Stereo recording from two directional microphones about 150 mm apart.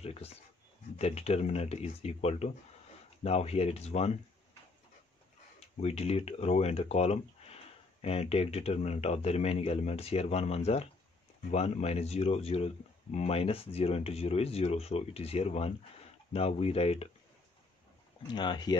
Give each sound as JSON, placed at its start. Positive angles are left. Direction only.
{"t": 0.0, "sound": "a sound", "side_deg": 45}
{"t": 0.9, "sound": "speech", "side_deg": 45}
{"t": 5.8, "sound": "speech", "side_deg": 45}
{"t": 18.3, "sound": "speech", "side_deg": 30}